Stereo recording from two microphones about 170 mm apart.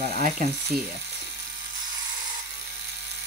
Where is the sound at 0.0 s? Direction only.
50° right (ahead or behind).